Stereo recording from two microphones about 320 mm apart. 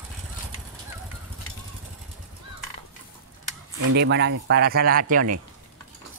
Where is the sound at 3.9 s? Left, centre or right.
Right.